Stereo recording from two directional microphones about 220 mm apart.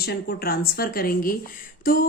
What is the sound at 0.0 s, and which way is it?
A woman's voice, 45° left (ahead or behind).